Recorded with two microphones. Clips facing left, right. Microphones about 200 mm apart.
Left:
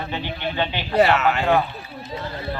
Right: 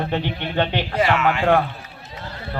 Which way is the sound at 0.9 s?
35° left (ahead or behind).